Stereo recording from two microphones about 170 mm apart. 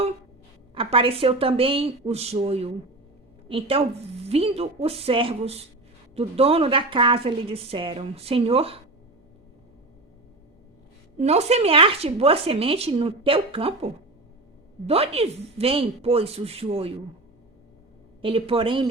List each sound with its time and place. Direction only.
0.7 s speech: 30° right (ahead or behind)
11.2 s speech: 40° right (ahead or behind)
18.2 s speech: 30° right (ahead or behind)